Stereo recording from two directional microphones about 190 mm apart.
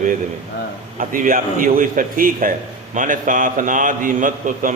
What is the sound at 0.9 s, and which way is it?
A man's voice, 45° right (ahead or behind).